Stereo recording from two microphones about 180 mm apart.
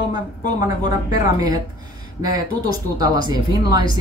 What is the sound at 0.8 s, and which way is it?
Speech, 20° right (ahead or behind).